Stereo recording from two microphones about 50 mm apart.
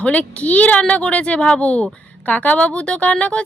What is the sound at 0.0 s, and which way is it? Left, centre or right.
Speech, left.